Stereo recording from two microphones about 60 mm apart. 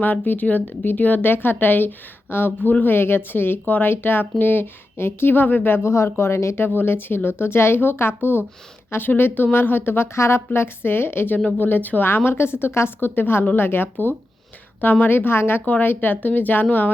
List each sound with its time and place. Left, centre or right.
0.0 s speech: left
6.7 s speech: left
11.4 s speech: left
15.6 s speech: left